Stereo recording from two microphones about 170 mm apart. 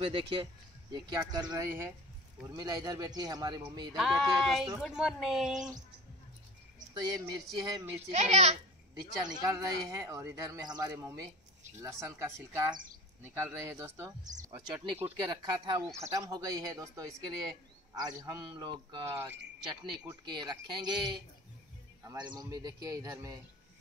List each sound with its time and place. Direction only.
0.0 s a child's voice: 30° right (ahead or behind)
3.9 s speech: centre (ahead or behind)
6.9 s speech: 25° right (ahead or behind)
8.1 s a child's voice: 40° right (ahead or behind)
9.2 s speech: 20° right (ahead or behind)
15.2 s speech: 25° right (ahead or behind)
19.0 s speech: 15° right (ahead or behind)